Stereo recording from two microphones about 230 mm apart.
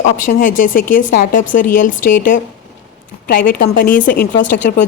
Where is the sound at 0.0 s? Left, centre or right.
Left.